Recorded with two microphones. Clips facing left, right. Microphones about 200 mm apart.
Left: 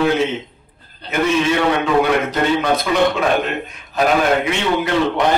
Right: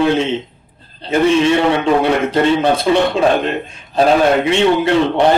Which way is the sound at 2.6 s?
30° right (ahead or behind).